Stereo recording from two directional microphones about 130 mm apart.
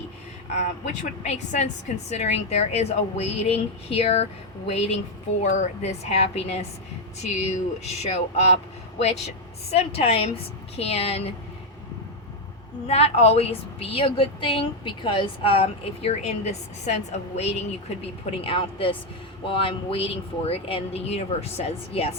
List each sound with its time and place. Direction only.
1.2 s a woman's voice: 60° left (ahead or behind)
9.7 s a woman's voice: 50° left (ahead or behind)
12.9 s a woman's voice: 55° left (ahead or behind)